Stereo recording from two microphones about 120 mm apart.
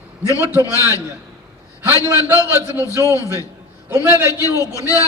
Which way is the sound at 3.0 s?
25° left (ahead or behind).